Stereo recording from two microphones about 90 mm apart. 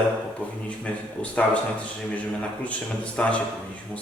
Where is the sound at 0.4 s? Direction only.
15° left (ahead or behind).